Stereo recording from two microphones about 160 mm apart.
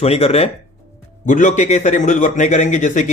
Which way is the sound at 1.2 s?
50° left (ahead or behind).